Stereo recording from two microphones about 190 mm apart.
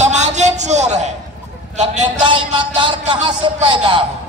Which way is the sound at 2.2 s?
25° right (ahead or behind).